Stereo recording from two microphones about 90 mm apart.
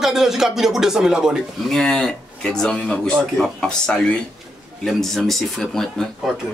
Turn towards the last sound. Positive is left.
turn(degrees=5)  # may be behind; listen again after turning